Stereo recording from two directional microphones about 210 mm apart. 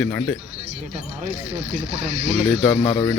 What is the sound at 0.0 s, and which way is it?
Speech, 5° left (ahead or behind).